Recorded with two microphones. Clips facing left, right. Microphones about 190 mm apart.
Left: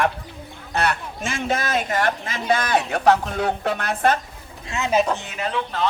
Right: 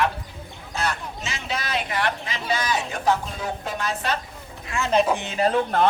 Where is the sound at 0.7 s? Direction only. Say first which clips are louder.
Left 4 dB; 65° left (ahead or behind).